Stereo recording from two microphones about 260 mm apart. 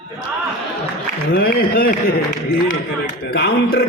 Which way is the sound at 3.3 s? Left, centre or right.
Left.